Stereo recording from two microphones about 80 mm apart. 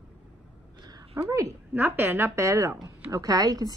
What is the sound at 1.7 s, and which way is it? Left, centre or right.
A woman's voice, right.